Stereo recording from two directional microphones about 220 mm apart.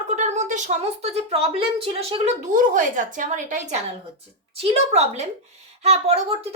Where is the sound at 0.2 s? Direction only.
35° right (ahead or behind).